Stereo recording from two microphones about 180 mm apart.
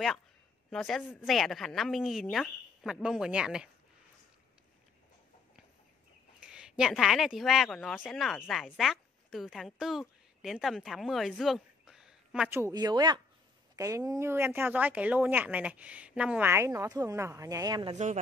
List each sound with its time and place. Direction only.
0.7 s speech: centre (ahead or behind)
6.4 s a woman's voice: 5° right (ahead or behind)
12.5 s speech: 20° right (ahead or behind)
17.9 s speech: 40° right (ahead or behind)